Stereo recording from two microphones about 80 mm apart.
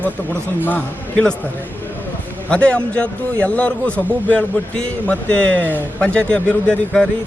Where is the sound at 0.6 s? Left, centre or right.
Centre.